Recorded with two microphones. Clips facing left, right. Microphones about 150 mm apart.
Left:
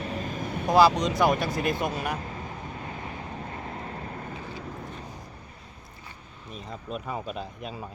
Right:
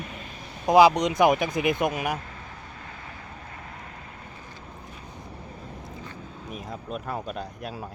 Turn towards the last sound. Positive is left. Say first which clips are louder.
# right 1 dB
turn(degrees=-5)  # may be behind; listen again after turning